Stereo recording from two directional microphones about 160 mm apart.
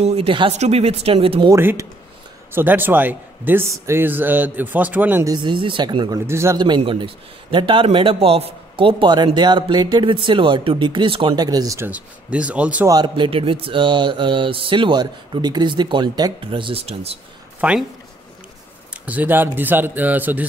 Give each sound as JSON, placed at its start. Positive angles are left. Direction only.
{"t": 0.0, "sound": "speech", "side_deg": -40}
{"t": 1.5, "sound": "a man's voice", "side_deg": -15}
{"t": 5.3, "sound": "speech", "side_deg": -30}
{"t": 6.6, "sound": "speech", "side_deg": -30}
{"t": 12.8, "sound": "speech", "side_deg": -25}
{"t": 17.6, "sound": "speech", "side_deg": -5}
{"t": 19.0, "sound": "a man's voice", "side_deg": -10}